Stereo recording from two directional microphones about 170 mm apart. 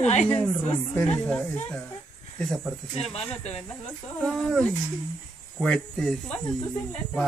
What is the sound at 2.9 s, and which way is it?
Speech, 35° left (ahead or behind).